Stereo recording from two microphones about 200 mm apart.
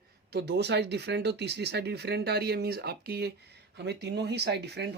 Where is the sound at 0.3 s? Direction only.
55° right (ahead or behind).